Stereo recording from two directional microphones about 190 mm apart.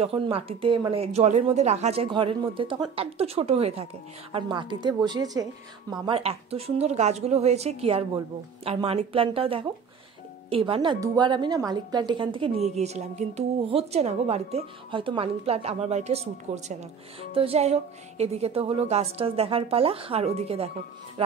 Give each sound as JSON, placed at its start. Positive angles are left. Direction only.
{"t": 0.0, "sound": "a woman's voice", "side_deg": -30}